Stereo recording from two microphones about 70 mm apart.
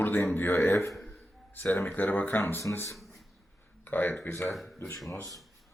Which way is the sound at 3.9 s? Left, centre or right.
Left.